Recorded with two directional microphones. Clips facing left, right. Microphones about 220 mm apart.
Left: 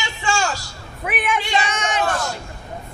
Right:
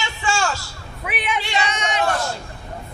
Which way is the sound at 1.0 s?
50° left (ahead or behind).